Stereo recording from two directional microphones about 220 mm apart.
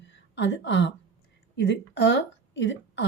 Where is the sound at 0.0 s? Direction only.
55° left (ahead or behind).